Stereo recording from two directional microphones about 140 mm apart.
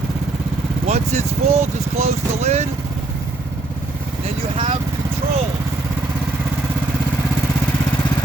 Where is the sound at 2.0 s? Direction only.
50° right (ahead or behind).